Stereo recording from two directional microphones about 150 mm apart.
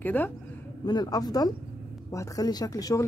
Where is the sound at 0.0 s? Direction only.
10° left (ahead or behind).